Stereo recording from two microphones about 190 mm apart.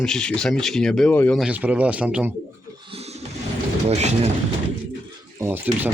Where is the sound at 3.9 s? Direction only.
35° right (ahead or behind).